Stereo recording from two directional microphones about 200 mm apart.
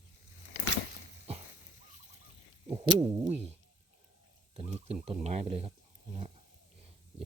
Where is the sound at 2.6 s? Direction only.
25° right (ahead or behind).